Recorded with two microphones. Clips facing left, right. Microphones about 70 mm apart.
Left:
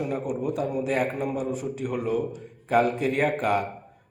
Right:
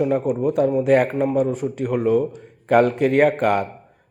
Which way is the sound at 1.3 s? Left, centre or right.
Right.